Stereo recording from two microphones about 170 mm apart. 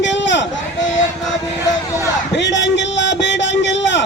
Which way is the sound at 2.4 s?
90° left.